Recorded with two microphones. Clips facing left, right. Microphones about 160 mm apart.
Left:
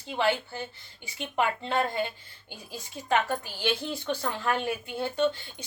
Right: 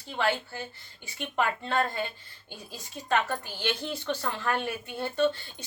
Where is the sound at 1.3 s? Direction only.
15° left (ahead or behind).